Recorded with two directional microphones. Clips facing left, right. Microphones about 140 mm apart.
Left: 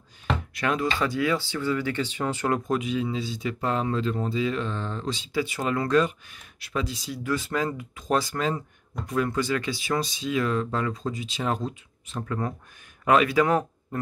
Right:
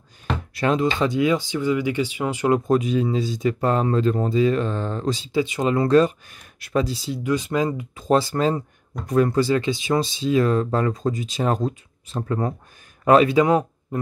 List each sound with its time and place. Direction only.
0.6 s speech: 25° right (ahead or behind)
2.7 s speech: 40° right (ahead or behind)
5.3 s speech: 20° right (ahead or behind)
8.0 s speech: 30° right (ahead or behind)